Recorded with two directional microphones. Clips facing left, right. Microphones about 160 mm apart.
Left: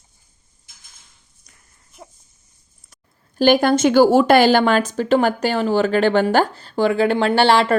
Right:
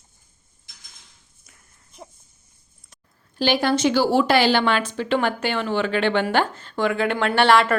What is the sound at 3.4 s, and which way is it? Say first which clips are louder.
A woman's voice: left 6 dB; 50° left (ahead or behind).